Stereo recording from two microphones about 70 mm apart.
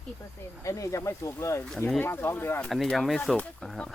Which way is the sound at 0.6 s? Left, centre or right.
Left.